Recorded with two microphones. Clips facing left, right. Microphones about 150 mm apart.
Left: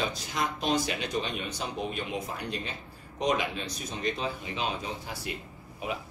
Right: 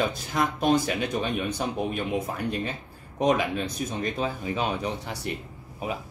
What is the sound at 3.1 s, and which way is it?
Speech, 50° right (ahead or behind).